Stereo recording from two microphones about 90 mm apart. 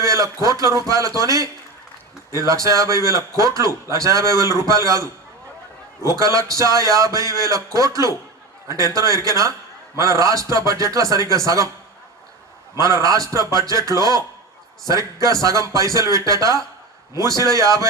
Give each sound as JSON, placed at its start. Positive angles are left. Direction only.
{"t": 0.0, "sound": "a man's voice", "side_deg": -35}
{"t": 12.7, "sound": "a man's voice", "side_deg": -35}